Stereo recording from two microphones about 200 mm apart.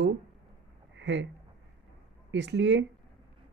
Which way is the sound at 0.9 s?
65° right (ahead or behind).